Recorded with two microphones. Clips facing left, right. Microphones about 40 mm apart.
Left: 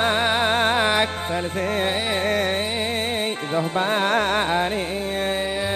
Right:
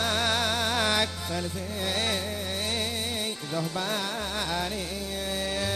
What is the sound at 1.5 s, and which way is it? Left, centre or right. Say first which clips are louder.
Music: left 11 dB; left.